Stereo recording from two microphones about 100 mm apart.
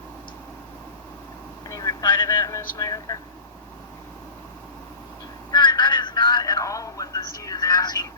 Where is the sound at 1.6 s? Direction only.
35° left (ahead or behind).